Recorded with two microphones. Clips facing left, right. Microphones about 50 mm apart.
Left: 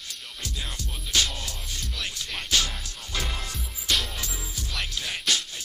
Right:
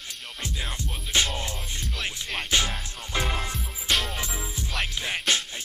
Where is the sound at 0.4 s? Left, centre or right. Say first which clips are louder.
Right 3 dB; right.